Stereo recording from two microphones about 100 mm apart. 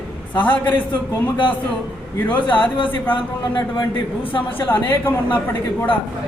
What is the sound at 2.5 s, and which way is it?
A man's voice, 55° left (ahead or behind).